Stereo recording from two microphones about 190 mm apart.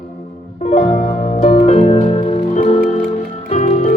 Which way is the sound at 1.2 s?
40° left (ahead or behind).